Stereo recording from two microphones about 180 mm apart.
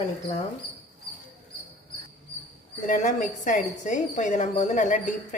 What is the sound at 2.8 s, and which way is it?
A woman's voice, 45° left (ahead or behind).